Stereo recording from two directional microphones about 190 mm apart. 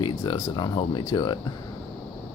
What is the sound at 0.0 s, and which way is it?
Speech, 25° left (ahead or behind).